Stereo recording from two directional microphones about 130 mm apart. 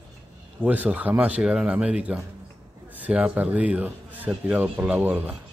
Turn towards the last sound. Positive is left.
turn(degrees=-15)  # may be behind; listen again after turning